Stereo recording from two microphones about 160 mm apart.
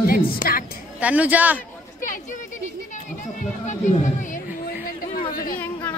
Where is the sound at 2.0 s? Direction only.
55° left (ahead or behind).